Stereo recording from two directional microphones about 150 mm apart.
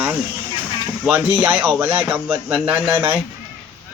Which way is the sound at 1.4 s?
15° right (ahead or behind).